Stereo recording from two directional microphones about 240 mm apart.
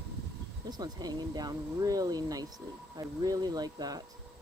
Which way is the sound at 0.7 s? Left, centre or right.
Centre.